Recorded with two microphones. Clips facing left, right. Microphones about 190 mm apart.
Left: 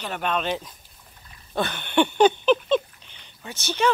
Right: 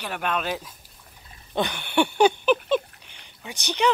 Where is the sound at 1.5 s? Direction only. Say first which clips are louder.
Left 1 dB; 15° right (ahead or behind).